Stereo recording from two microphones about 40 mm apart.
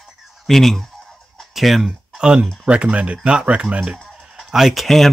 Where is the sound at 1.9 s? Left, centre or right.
Right.